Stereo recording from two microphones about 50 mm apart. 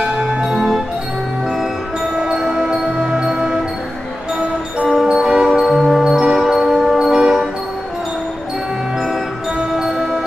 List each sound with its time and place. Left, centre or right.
0.1 s music: centre
2.1 s music: right
5.0 s music: centre
9.6 s music: centre